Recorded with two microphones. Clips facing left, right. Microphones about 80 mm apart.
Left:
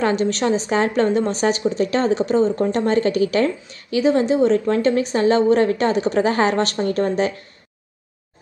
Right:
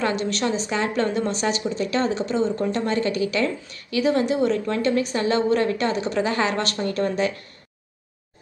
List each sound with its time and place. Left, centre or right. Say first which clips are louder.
0.1 s a woman's voice: left 5 dB; left